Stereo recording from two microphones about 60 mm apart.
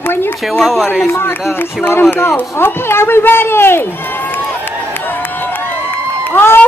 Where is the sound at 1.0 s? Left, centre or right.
Left.